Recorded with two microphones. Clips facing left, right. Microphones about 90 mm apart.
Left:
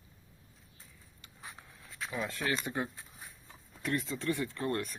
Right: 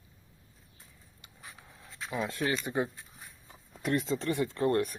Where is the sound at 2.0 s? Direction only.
20° right (ahead or behind).